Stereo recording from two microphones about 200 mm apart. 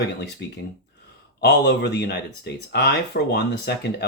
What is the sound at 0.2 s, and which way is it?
Speech, 60° left (ahead or behind).